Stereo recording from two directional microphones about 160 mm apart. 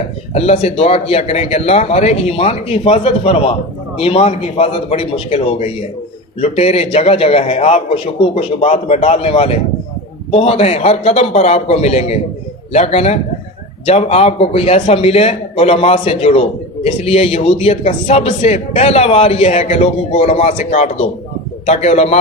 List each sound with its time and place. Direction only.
0.3 s a man's voice: 40° left (ahead or behind)